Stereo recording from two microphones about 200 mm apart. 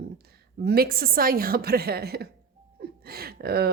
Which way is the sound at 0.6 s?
50° right (ahead or behind).